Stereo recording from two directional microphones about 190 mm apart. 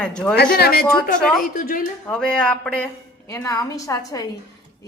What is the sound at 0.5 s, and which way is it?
A woman's voice, 55° left (ahead or behind).